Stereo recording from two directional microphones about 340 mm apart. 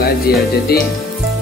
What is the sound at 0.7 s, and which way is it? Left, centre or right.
Speech, left.